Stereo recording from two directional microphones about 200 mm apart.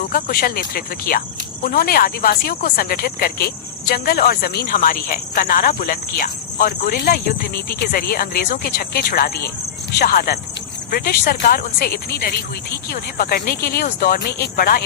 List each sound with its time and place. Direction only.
0.1 s speech: 50° left (ahead or behind)